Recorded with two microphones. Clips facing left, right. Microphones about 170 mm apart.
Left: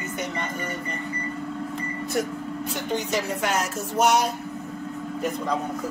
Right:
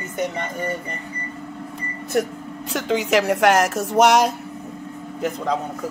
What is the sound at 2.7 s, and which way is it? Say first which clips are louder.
Speech: right 8 dB; 90° right.